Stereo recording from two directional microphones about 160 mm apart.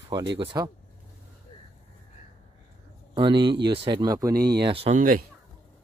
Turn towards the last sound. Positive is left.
turn(degrees=-60)  # may be behind; listen again after turning